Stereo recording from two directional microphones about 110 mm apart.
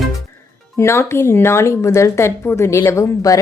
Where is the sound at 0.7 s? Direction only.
25° left (ahead or behind).